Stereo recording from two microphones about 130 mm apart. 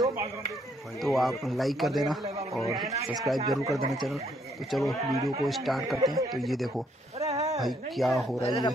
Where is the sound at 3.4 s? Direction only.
25° right (ahead or behind).